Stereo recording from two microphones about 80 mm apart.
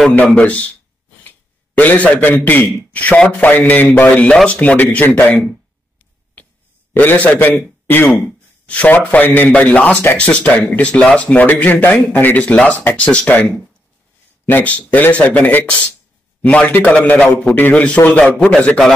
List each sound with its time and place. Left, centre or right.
0.4 s a man's voice: centre
1.8 s a man's voice: centre
6.9 s a man's voice: left
7.8 s a sound: left
8.6 s a man's voice: centre